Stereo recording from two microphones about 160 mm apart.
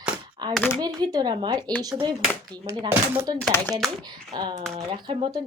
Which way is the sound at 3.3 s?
25° right (ahead or behind).